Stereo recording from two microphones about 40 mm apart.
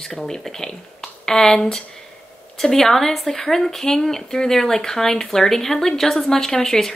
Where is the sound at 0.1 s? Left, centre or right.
Centre.